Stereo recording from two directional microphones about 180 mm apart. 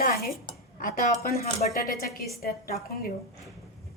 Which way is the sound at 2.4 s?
55° left (ahead or behind).